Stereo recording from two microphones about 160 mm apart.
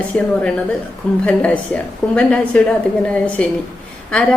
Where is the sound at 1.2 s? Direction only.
5° left (ahead or behind).